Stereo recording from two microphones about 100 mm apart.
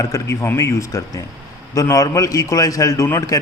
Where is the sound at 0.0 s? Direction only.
35° left (ahead or behind).